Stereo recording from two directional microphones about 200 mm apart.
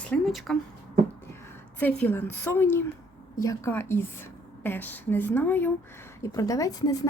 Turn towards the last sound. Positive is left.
turn(degrees=20)  # may be behind; listen again after turning